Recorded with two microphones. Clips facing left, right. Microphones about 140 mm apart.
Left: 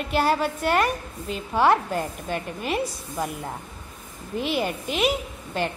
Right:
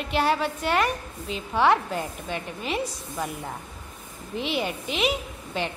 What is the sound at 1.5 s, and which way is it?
Speech, 5° left (ahead or behind).